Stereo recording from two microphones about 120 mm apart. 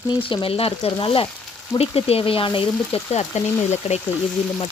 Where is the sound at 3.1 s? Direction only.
65° left (ahead or behind).